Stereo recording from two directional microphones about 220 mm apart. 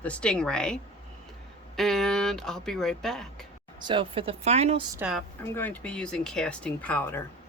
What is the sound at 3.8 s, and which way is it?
Speech, 20° right (ahead or behind).